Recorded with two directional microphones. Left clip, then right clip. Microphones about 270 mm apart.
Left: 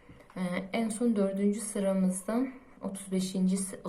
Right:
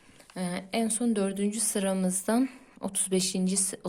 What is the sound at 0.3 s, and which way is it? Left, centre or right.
Speech, right.